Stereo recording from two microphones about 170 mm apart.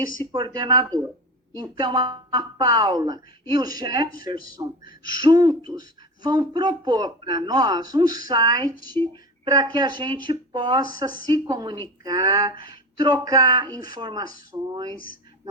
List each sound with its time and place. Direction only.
0.2 s speech: 25° right (ahead or behind)